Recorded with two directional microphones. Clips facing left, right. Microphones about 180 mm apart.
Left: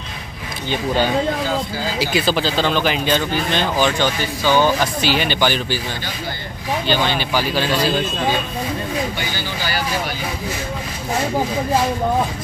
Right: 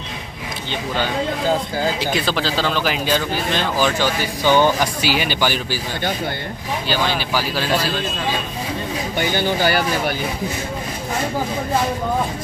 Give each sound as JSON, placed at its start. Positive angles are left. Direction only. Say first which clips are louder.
{"t": 2.0, "sound": "speech", "louder": "left 2 dB", "side_deg": 5}
{"t": 4.5, "sound": "speech", "louder": "even", "side_deg": -15}
{"t": 6.9, "sound": "speech", "louder": "left 1 dB", "side_deg": -5}
{"t": 9.2, "sound": "speech", "louder": "right 7 dB", "side_deg": -50}